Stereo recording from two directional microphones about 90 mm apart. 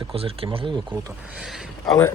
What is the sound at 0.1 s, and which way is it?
Speech, 90° right.